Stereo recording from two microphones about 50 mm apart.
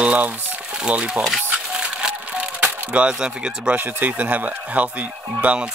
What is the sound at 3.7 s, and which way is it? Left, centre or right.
Speech, right.